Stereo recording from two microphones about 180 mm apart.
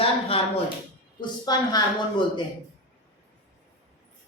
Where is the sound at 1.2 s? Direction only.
25° left (ahead or behind).